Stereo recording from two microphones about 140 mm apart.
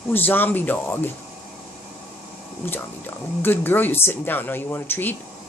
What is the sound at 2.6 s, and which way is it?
Speech, 15° left (ahead or behind).